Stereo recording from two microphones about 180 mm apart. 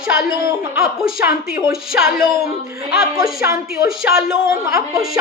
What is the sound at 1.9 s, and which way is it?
Speech, 5° right (ahead or behind).